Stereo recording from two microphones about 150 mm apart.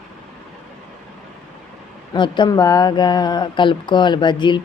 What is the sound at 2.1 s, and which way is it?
Speech, 30° left (ahead or behind).